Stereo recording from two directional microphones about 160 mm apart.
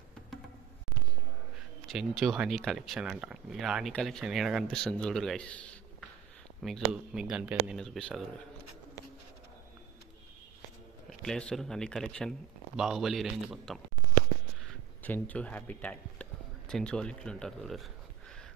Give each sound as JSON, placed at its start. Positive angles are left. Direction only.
{"t": 1.9, "sound": "speech", "side_deg": 0}
{"t": 11.1, "sound": "speech", "side_deg": 5}
{"t": 15.0, "sound": "a man's voice", "side_deg": 10}